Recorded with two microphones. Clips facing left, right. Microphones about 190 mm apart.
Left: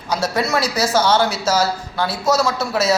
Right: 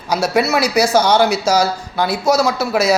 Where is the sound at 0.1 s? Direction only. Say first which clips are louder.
Right 4 dB; 10° right (ahead or behind).